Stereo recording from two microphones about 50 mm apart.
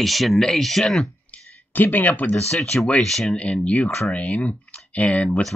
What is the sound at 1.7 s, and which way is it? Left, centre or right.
Speech, left.